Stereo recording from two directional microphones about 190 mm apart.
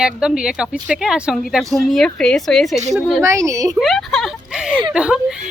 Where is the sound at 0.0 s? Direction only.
5° right (ahead or behind).